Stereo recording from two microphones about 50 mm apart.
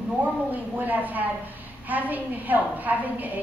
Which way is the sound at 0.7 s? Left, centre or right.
Right.